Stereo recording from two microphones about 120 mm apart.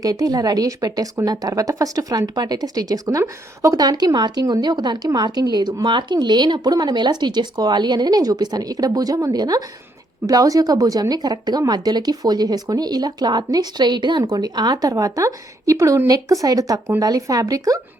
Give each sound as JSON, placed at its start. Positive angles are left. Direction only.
{"t": 0.0, "sound": "a woman's voice", "side_deg": -30}